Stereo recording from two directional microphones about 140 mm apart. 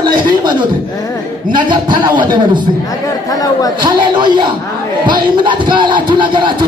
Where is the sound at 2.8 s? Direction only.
25° left (ahead or behind).